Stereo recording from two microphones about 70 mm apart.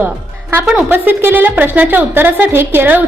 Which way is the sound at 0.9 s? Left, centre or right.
Right.